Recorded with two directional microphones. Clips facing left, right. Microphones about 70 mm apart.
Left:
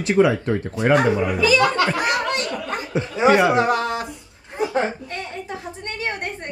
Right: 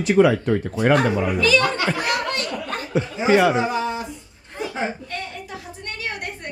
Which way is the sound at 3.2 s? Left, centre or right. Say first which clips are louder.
Left 2 dB; left.